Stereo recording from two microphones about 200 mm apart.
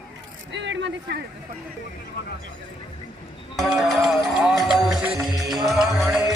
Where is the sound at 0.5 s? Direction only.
65° right (ahead or behind).